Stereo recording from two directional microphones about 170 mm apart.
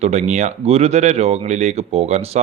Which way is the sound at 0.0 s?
40° right (ahead or behind).